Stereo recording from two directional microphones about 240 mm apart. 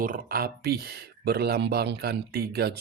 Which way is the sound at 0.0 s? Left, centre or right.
Right.